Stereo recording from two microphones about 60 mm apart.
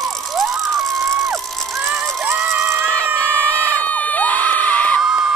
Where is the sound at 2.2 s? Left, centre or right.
Right.